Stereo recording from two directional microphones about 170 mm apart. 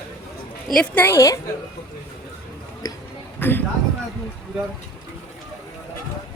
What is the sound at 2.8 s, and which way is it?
Speech, 25° left (ahead or behind).